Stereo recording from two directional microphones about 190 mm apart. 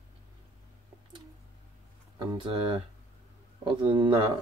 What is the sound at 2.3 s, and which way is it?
Speech, 25° right (ahead or behind).